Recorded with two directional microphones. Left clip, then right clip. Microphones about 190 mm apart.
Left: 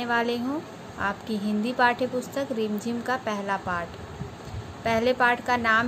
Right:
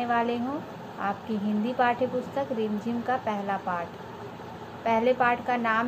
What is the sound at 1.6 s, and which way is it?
A woman's voice, 60° left (ahead or behind).